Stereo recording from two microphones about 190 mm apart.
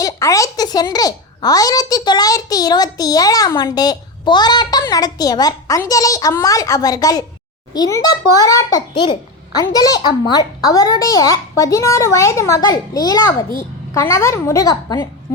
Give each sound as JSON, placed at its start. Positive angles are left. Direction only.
{"t": 0.0, "sound": "a child's voice", "side_deg": 15}